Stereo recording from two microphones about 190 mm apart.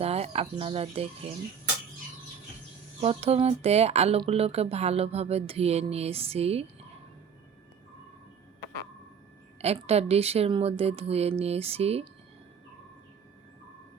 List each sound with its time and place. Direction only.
0.0 s speech: 35° right (ahead or behind)
3.0 s speech: 30° right (ahead or behind)
9.6 s speech: 35° right (ahead or behind)